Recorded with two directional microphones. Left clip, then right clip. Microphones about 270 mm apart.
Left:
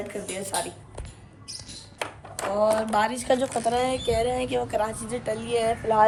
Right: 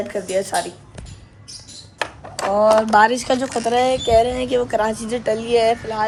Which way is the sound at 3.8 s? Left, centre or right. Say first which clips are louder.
Right 13 dB; centre.